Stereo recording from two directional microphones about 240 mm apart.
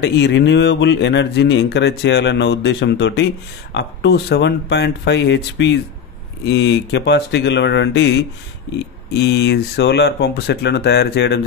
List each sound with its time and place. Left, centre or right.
0.0 s speech: left